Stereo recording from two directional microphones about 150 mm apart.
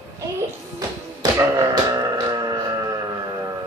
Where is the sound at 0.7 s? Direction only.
25° right (ahead or behind).